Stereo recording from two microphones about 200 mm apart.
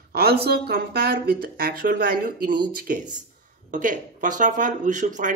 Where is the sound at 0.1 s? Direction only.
50° right (ahead or behind).